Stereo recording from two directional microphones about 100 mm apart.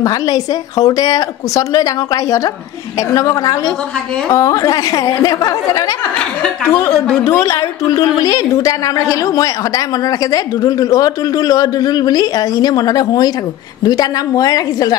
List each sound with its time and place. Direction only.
0.0 s speech: 35° left (ahead or behind)
6.7 s a woman's voice: 20° left (ahead or behind); by 15.0 s 40° left (ahead or behind)